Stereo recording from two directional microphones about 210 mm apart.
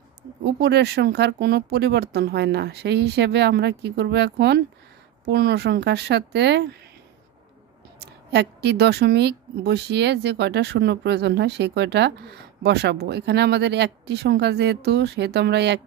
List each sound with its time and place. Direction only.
0.4 s speech: 50° right (ahead or behind)
8.3 s speech: 50° right (ahead or behind)